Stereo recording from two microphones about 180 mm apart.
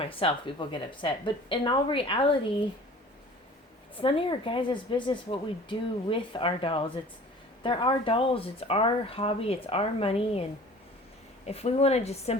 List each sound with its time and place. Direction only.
0.0 s speech: 30° left (ahead or behind)
3.9 s speech: 30° left (ahead or behind)
11.4 s speech: 35° left (ahead or behind)